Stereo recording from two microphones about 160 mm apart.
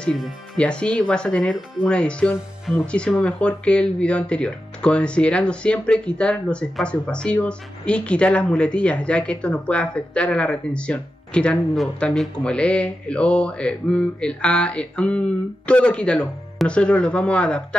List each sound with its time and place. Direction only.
0.0 s speech: 5° left (ahead or behind)